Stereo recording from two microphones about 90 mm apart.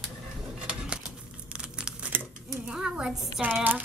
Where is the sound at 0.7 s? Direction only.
10° right (ahead or behind).